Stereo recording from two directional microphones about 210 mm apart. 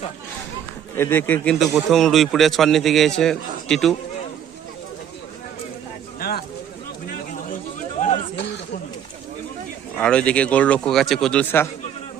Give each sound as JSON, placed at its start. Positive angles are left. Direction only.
{"t": 0.9, "sound": "a man's voice", "side_deg": 10}
{"t": 6.1, "sound": "a sound", "side_deg": 45}
{"t": 10.0, "sound": "a man's voice", "side_deg": 5}